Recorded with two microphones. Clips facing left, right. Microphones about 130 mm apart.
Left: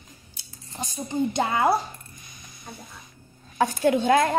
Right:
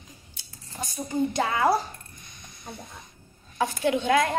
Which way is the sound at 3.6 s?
45° left (ahead or behind).